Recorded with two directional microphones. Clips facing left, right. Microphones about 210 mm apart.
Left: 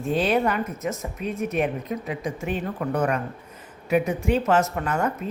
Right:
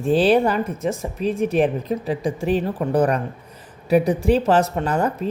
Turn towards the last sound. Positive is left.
turn(degrees=-35)  # may be behind; listen again after turning